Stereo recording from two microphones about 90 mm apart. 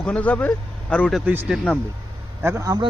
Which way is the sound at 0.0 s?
15° left (ahead or behind).